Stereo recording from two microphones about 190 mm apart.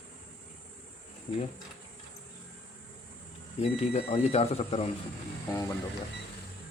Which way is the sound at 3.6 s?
30° left (ahead or behind).